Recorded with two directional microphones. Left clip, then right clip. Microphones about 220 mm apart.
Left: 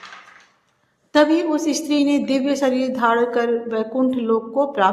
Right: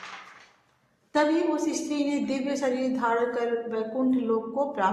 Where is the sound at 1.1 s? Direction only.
35° left (ahead or behind).